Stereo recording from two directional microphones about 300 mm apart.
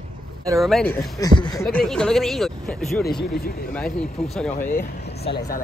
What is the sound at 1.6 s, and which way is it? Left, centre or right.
Speech, centre.